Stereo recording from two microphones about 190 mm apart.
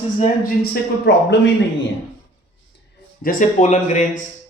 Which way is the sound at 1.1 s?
60° left (ahead or behind).